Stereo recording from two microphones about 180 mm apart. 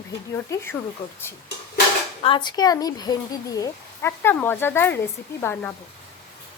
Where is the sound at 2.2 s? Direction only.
30° left (ahead or behind); by 5.7 s 10° left (ahead or behind).